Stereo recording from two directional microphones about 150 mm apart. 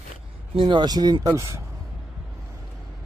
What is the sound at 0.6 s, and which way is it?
Speech, 30° right (ahead or behind).